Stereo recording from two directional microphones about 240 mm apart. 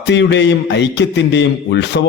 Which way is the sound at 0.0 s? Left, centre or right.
Left.